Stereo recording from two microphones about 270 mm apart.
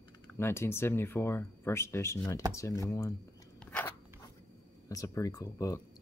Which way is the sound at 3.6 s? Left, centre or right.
Centre.